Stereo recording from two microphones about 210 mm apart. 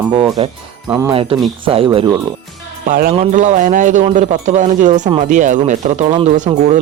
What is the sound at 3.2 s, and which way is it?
Speech, 35° right (ahead or behind).